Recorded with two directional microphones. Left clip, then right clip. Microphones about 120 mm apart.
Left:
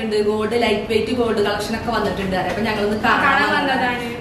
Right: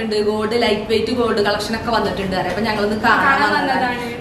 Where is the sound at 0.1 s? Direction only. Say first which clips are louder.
Even; 15° right (ahead or behind).